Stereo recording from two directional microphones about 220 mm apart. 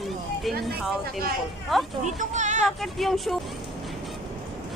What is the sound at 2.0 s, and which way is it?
Speech, 35° right (ahead or behind).